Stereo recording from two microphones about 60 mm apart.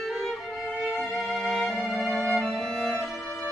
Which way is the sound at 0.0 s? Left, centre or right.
Centre.